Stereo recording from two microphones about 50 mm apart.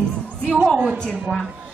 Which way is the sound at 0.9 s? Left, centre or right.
Centre.